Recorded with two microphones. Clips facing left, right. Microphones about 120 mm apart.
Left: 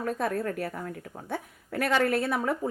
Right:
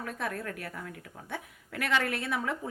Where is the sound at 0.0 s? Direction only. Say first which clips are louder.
Left 7 dB; 40° left (ahead or behind).